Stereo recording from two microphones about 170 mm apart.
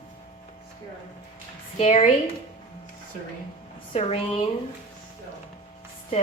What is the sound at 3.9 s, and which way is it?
Speech, 35° left (ahead or behind).